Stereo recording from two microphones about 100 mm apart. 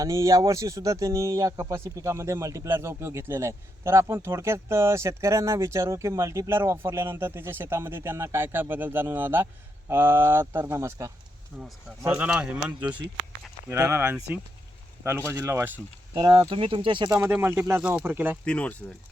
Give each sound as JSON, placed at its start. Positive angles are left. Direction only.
{"t": 0.0, "sound": "speech", "side_deg": -30}
{"t": 11.5, "sound": "speech", "side_deg": 0}
{"t": 12.0, "sound": "speech", "side_deg": -15}
{"t": 13.7, "sound": "speech", "side_deg": -25}
{"t": 16.1, "sound": "speech", "side_deg": -50}
{"t": 17.2, "sound": "speech", "side_deg": -25}
{"t": 18.4, "sound": "speech", "side_deg": 15}